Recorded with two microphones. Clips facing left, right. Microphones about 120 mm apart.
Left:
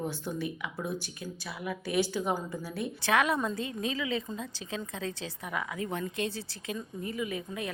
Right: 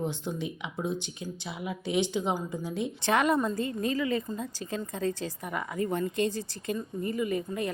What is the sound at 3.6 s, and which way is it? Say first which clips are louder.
Speech: right 4 dB; 90° left.